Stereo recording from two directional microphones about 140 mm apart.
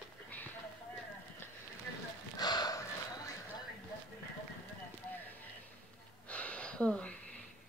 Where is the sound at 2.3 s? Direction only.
30° left (ahead or behind).